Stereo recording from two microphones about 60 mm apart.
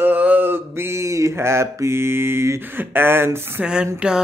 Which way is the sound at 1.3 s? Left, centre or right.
Right.